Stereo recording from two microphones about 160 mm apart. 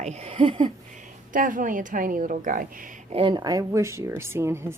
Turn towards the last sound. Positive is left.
turn(degrees=-15)  # may be behind; listen again after turning